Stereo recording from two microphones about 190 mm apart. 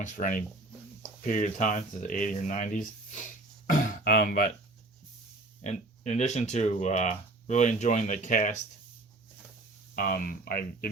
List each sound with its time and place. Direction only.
0.0 s speech: 45° left (ahead or behind)
5.6 s speech: 35° left (ahead or behind)
9.9 s speech: 45° left (ahead or behind)